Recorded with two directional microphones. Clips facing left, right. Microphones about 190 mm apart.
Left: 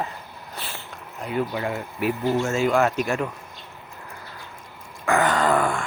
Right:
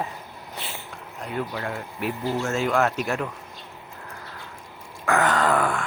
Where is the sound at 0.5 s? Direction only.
20° right (ahead or behind).